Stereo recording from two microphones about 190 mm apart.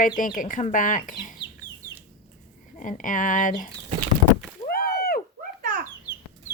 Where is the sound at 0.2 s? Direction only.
45° left (ahead or behind).